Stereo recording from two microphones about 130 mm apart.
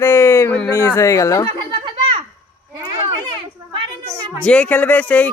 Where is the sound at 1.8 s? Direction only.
40° right (ahead or behind).